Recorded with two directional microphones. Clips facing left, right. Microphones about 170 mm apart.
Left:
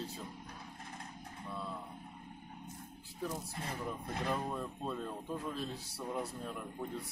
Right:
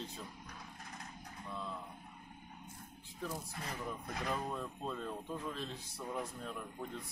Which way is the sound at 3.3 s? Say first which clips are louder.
Even; 30° left (ahead or behind).